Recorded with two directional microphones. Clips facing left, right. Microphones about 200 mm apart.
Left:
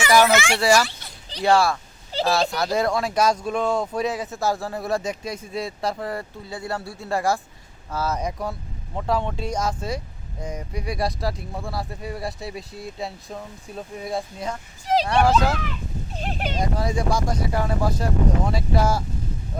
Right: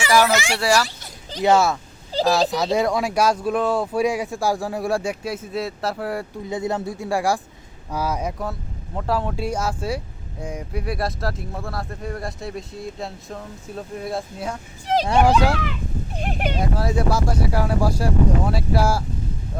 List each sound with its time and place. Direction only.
0.3 s speech: 35° right (ahead or behind)
1.4 s speech: 20° right (ahead or behind)
2.2 s speech: centre (ahead or behind)
2.8 s speech: 10° right (ahead or behind)
15.0 s speech: 20° right (ahead or behind)